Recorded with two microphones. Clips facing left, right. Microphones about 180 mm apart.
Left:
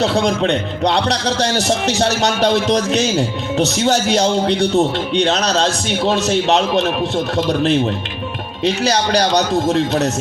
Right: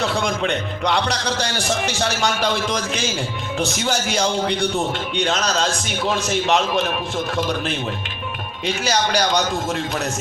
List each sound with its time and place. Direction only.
0.0 s a man's voice: 35° left (ahead or behind)